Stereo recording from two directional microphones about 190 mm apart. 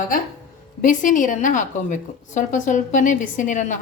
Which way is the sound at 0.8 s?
45° left (ahead or behind).